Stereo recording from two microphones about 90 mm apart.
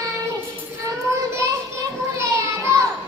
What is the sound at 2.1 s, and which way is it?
Child singing, 30° right (ahead or behind).